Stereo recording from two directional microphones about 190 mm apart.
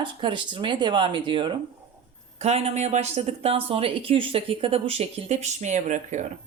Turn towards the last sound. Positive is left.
turn(degrees=-40)  # may be behind; listen again after turning